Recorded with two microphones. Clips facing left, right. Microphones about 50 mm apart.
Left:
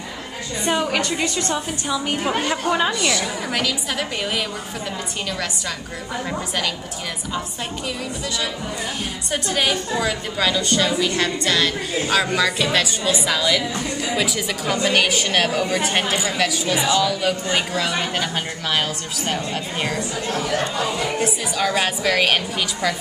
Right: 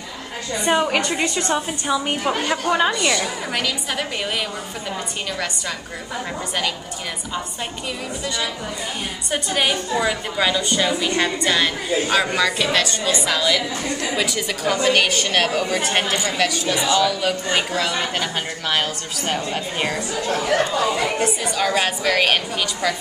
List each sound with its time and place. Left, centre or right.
0.7 s a woman's voice: centre
9.3 s a woman's voice: centre
20.8 s speech: centre
21.2 s a woman's voice: centre